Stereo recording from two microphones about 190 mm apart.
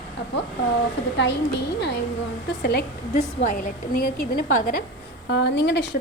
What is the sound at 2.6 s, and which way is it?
Speech, 60° left (ahead or behind).